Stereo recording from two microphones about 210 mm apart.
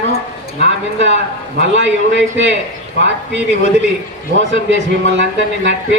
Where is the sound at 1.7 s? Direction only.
60° right (ahead or behind).